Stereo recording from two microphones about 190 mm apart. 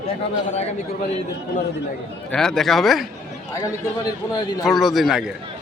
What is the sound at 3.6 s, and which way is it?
A man's voice, 20° left (ahead or behind).